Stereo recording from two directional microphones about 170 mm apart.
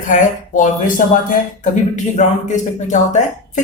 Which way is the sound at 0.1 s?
50° left (ahead or behind).